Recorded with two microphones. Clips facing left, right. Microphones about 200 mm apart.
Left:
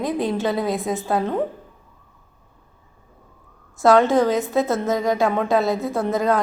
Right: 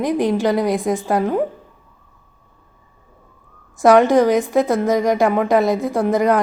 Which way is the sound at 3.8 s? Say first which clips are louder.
Right 3 dB; 15° right (ahead or behind).